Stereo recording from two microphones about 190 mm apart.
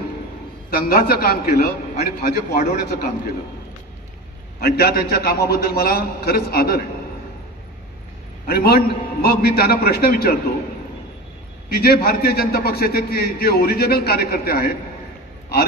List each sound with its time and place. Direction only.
0.8 s a man's voice: 50° left (ahead or behind)
4.6 s a man's voice: 55° left (ahead or behind)
8.5 s a man's voice: 55° left (ahead or behind)
11.7 s a man's voice: 55° left (ahead or behind)